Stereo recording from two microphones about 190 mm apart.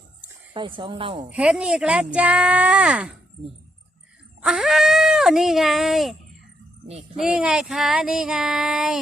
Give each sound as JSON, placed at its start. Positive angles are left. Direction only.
{"t": 0.5, "sound": "speech", "side_deg": -25}
{"t": 1.3, "sound": "child singing", "side_deg": -5}
{"t": 4.4, "sound": "child singing", "side_deg": 0}
{"t": 7.2, "sound": "child singing", "side_deg": -5}